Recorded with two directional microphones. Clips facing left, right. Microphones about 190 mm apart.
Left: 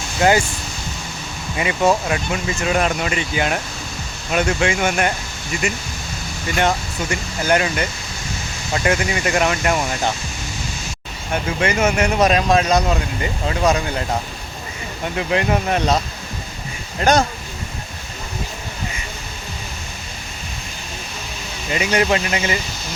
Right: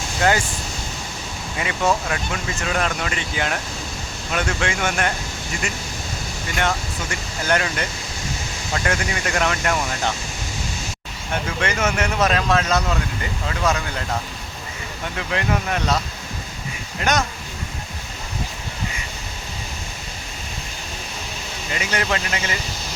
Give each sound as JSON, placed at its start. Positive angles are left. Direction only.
{"t": 0.2, "sound": "speech", "side_deg": 15}
{"t": 1.5, "sound": "speech", "side_deg": 15}
{"t": 6.6, "sound": "speech", "side_deg": 15}
{"t": 11.4, "sound": "speech", "side_deg": 10}
{"t": 17.0, "sound": "speech", "side_deg": 30}
{"t": 21.7, "sound": "speech", "side_deg": 15}